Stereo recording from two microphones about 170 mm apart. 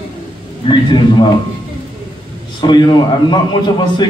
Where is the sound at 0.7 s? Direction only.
25° left (ahead or behind).